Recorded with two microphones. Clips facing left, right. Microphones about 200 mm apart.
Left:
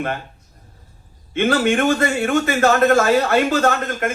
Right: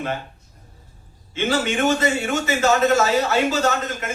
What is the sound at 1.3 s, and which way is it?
A man's voice, 55° left (ahead or behind).